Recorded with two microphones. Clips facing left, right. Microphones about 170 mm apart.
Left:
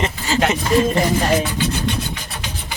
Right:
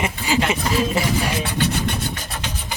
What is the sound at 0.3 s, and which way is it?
Speech, 15° right (ahead or behind).